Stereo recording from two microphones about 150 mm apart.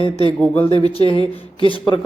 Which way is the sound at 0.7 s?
30° right (ahead or behind).